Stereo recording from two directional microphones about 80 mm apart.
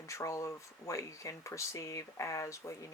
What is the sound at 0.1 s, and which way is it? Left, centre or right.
Speech, left.